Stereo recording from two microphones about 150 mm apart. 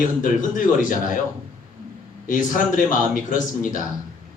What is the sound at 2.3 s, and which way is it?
A man's voice, 60° left (ahead or behind).